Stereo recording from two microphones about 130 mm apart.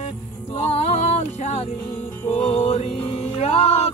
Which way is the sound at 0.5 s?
50° left (ahead or behind).